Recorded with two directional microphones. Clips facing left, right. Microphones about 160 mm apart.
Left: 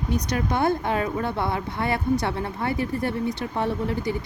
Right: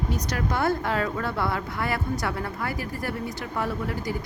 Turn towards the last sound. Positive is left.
turn(degrees=25)  # may be behind; listen again after turning